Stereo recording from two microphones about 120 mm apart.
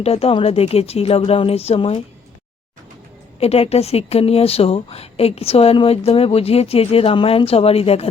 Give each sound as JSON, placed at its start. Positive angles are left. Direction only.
{"t": 0.0, "sound": "speech", "side_deg": 55}
{"t": 3.4, "sound": "speech", "side_deg": 60}